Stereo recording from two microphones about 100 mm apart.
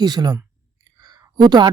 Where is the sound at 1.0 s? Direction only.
45° right (ahead or behind).